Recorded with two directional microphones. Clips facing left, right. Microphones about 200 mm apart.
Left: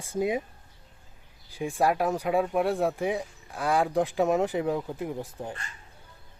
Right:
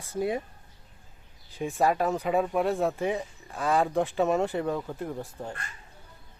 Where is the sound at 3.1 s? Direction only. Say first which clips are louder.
Even; 10° left (ahead or behind).